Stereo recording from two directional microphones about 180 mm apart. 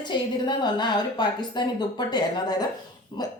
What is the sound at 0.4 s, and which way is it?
A woman's voice, 25° left (ahead or behind).